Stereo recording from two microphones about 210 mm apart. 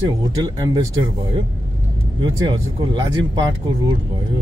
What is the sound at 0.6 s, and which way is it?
Speech, 20° right (ahead or behind).